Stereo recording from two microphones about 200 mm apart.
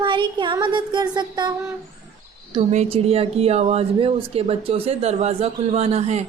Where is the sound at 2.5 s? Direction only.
30° right (ahead or behind).